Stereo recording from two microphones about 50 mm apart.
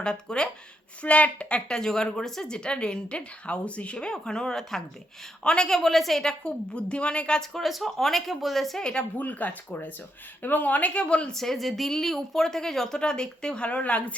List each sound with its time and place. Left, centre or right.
0.0 s speech: centre
1.0 s a woman's voice: left; by 6.3 s centre
6.4 s a woman's voice: left
7.3 s speech: centre
8.8 s a woman's voice: left
9.1 s a woman's voice: left
11.3 s speech: centre
13.7 s a woman's voice: left